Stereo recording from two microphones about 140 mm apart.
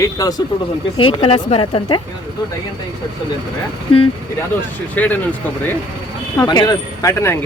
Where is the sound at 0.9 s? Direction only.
40° left (ahead or behind).